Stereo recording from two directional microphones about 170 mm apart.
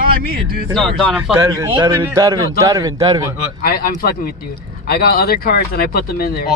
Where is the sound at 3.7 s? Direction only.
60° left (ahead or behind).